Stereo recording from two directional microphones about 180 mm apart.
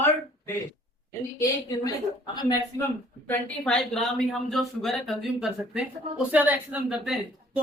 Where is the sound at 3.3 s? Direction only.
5° left (ahead or behind).